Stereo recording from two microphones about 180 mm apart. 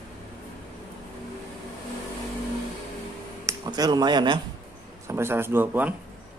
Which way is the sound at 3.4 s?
20° right (ahead or behind).